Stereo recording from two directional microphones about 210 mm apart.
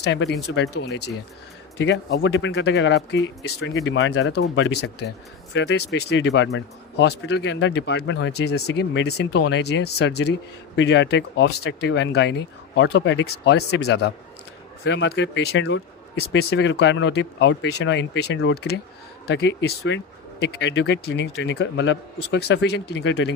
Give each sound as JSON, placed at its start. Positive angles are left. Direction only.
{"t": 0.0, "sound": "speech", "side_deg": 55}